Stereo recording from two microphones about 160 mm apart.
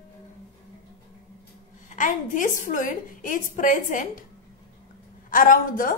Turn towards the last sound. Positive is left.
turn(degrees=55)  # may be behind; listen again after turning